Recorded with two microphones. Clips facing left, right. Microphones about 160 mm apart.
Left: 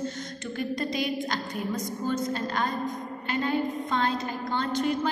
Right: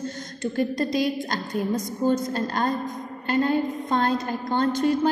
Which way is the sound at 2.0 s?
40° right (ahead or behind).